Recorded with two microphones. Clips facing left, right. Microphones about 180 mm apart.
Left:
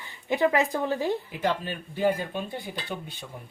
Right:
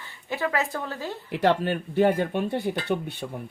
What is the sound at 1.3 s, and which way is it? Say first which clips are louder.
Speech: right 6 dB; 70° right (ahead or behind).